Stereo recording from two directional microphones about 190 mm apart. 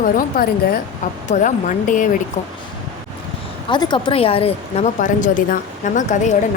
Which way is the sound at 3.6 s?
25° left (ahead or behind).